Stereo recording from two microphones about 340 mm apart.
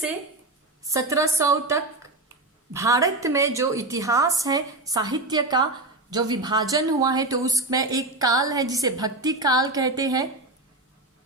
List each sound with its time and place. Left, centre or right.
0.9 s speech: centre